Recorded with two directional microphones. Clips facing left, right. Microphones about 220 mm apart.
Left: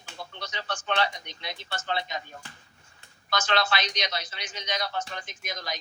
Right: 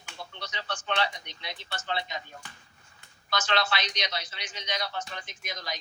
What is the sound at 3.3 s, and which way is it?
A man's voice, 45° left (ahead or behind).